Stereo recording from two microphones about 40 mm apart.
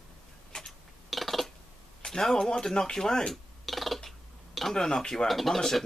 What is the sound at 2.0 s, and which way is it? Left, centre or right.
Speech, centre.